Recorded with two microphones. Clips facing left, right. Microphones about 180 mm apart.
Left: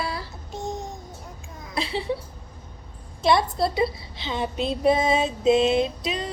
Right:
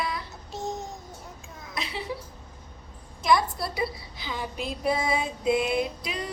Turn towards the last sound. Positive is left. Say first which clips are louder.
# left 5 dB
turn(degrees=25)  # may be behind; listen again after turning